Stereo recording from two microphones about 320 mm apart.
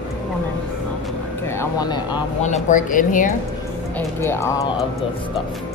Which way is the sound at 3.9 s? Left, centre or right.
Centre.